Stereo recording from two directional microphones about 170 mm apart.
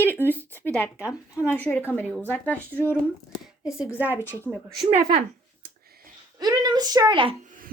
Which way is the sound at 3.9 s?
10° right (ahead or behind).